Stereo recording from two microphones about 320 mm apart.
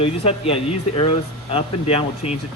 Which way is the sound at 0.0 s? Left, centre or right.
Centre.